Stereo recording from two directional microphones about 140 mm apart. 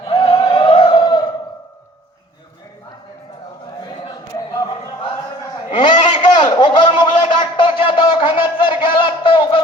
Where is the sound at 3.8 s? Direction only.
35° left (ahead or behind).